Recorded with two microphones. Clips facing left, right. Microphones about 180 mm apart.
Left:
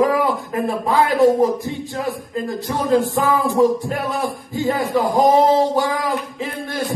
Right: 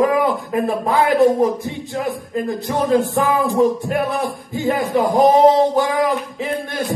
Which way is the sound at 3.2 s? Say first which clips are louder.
Even; 20° right (ahead or behind).